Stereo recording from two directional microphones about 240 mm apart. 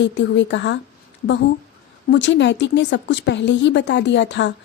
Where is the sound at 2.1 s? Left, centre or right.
Left.